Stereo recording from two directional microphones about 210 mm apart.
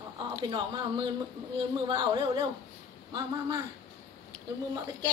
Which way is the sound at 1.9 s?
20° right (ahead or behind).